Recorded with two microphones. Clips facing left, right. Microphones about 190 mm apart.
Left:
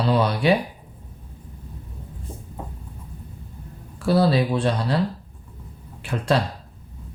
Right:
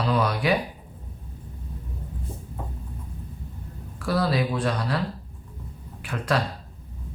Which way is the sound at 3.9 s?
30° left (ahead or behind).